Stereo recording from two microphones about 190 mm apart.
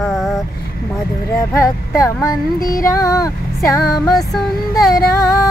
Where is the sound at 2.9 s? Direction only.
15° left (ahead or behind).